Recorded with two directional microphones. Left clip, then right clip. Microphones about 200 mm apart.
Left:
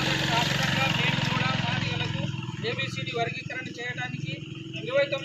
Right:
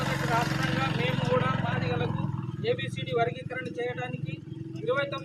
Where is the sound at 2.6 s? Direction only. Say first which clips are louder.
Right 1 dB; 5° left (ahead or behind).